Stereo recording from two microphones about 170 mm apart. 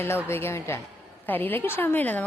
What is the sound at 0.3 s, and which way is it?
A woman's voice, 15° left (ahead or behind).